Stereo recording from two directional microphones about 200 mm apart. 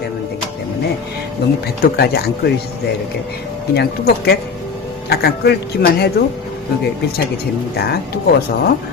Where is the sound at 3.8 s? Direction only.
55° left (ahead or behind).